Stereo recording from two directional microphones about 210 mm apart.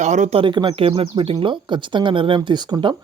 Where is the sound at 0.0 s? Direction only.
35° right (ahead or behind); by 2.9 s 20° right (ahead or behind).